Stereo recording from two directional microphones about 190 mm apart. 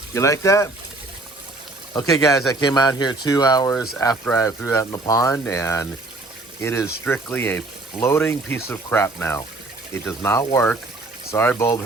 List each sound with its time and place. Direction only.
0.1 s speech: 15° left (ahead or behind)
2.0 s speech: 15° left (ahead or behind)